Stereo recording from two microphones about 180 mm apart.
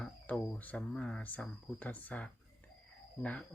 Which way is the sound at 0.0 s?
Centre (ahead or behind).